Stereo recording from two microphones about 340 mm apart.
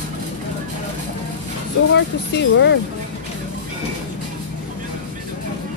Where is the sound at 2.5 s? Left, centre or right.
Left.